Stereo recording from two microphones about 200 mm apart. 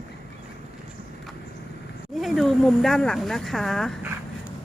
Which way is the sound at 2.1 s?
Centre (ahead or behind).